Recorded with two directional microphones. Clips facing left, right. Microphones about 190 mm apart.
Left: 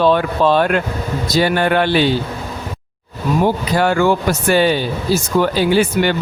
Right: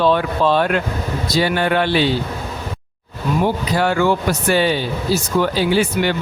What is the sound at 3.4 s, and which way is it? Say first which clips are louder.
Speech: left 2 dB; 45° left (ahead or behind).